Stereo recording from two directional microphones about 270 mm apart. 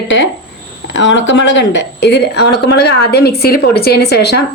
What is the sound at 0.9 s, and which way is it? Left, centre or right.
A woman's voice, left.